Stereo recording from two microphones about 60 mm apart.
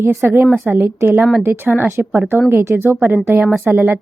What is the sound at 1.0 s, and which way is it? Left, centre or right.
Speech, right.